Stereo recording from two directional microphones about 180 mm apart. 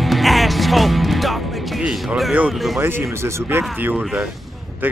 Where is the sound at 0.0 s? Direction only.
Centre (ahead or behind).